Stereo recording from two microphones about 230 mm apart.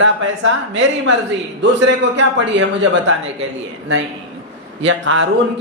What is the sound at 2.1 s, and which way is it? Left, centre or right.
Speech, right.